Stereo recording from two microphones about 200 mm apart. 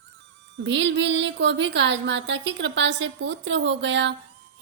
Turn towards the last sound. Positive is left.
turn(degrees=-65)  # may be behind; listen again after turning